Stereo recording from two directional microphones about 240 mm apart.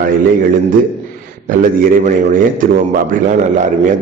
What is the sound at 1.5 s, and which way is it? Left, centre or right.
A man's voice, right.